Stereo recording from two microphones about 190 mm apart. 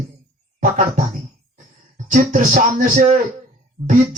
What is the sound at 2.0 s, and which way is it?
Speech, 45° right (ahead or behind).